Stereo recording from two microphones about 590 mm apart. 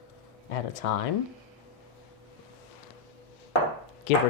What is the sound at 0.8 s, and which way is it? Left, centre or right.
Speech, left.